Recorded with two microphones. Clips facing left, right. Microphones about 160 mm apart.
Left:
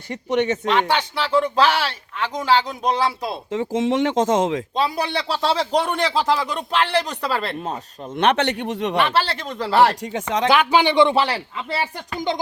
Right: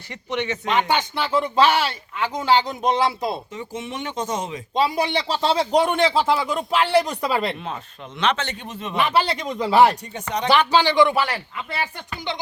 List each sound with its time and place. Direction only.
0.1 s speech: 45° left (ahead or behind)
0.8 s speech: 10° right (ahead or behind)
3.5 s speech: 90° left
5.4 s speech: 5° right (ahead or behind)
7.6 s speech: 45° left (ahead or behind); by 9.0 s 70° left (ahead or behind)
9.0 s speech: 10° right (ahead or behind)
9.9 s speech: 90° left
10.7 s speech: 15° left (ahead or behind)
12.1 s speech: 45° left (ahead or behind)